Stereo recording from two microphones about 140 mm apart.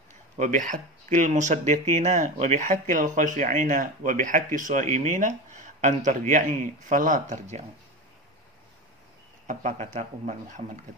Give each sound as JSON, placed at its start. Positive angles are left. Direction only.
{"t": 0.4, "sound": "speech", "side_deg": -65}
{"t": 9.5, "sound": "speech", "side_deg": -55}